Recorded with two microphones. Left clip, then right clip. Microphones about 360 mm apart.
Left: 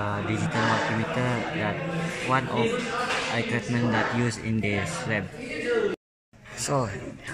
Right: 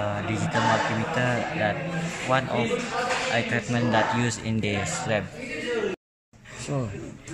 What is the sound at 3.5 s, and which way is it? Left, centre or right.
Speech, centre.